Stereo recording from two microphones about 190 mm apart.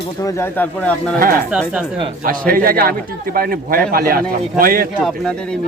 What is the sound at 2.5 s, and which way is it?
Speech, 50° right (ahead or behind).